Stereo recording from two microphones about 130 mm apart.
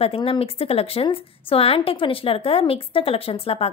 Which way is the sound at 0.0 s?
45° left (ahead or behind).